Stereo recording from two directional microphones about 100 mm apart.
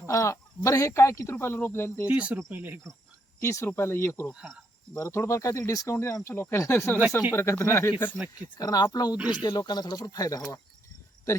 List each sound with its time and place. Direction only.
0.0 s speech: 30° left (ahead or behind)
2.0 s speech: 15° right (ahead or behind)
2.5 s cricket: 20° right (ahead or behind)
3.4 s speech: 30° left (ahead or behind)
4.4 s speech: 10° right (ahead or behind)
4.9 s speech: 30° left (ahead or behind)
8.4 s speech: 40° left (ahead or behind)